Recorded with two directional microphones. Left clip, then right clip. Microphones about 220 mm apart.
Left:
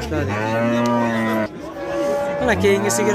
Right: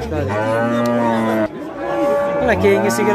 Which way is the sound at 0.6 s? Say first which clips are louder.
Right 2 dB; 40° right (ahead or behind).